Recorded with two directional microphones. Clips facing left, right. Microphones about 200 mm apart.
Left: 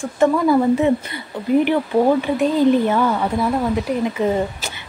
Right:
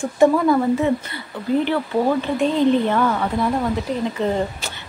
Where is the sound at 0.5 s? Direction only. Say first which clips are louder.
Left 2 dB; 15° left (ahead or behind).